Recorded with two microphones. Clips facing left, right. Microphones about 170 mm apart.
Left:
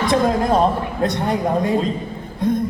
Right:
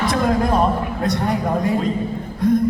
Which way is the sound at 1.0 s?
25° left (ahead or behind).